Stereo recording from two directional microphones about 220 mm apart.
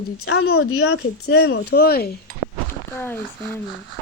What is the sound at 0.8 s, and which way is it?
Speech, 50° left (ahead or behind).